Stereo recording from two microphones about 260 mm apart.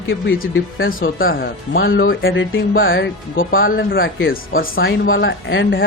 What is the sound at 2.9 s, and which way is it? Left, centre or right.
Speech, left.